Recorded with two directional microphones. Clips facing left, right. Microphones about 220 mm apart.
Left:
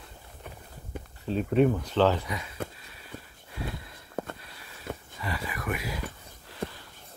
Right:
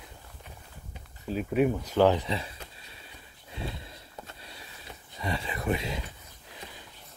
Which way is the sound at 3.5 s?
25° right (ahead or behind).